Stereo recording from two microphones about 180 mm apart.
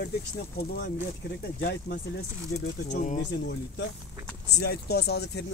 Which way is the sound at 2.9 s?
45° left (ahead or behind).